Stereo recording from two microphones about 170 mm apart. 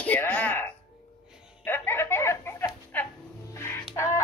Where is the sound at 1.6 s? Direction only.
15° left (ahead or behind).